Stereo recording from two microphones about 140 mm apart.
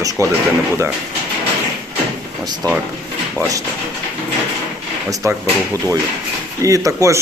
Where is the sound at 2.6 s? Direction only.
25° right (ahead or behind).